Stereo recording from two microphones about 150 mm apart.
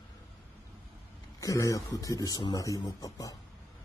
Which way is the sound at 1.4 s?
20° left (ahead or behind).